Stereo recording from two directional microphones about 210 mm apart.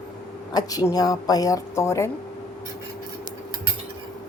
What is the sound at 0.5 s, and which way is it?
A woman's voice, 20° left (ahead or behind).